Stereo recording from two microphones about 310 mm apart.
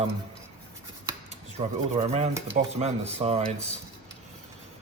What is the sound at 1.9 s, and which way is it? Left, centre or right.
Speech, centre.